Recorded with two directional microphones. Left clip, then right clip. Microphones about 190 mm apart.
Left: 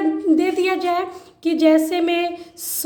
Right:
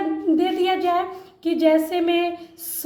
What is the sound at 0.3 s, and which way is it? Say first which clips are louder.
A woman's voice: left 1 dB; 35° left (ahead or behind).